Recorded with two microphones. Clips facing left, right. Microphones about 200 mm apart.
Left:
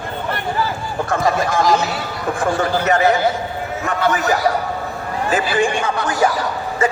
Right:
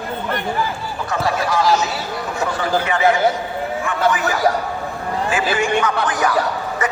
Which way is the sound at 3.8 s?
40° left (ahead or behind).